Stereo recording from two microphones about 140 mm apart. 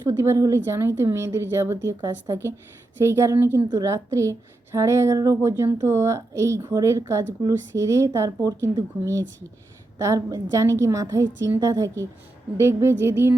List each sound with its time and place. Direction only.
0.1 s a woman's voice: 20° right (ahead or behind)
3.0 s a woman's voice: 20° right (ahead or behind)
12.5 s a sound: 20° right (ahead or behind)